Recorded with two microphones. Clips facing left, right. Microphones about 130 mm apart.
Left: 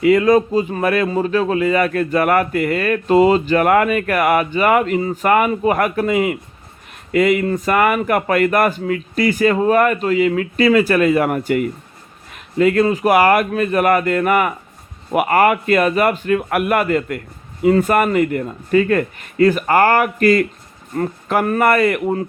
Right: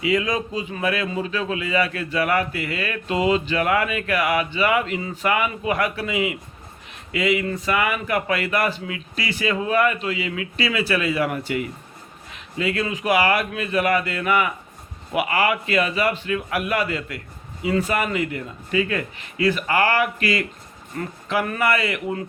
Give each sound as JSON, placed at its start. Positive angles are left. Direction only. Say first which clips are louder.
{"t": 0.0, "sound": "speech", "louder": "left 10 dB", "side_deg": 50}